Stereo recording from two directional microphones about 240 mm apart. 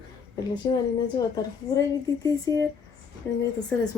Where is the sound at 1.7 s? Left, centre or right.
Centre.